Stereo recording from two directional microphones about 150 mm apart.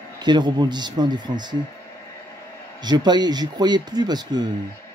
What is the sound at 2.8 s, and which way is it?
Speech, 30° right (ahead or behind).